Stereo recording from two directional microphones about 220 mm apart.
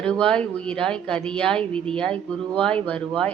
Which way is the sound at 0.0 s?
5° left (ahead or behind).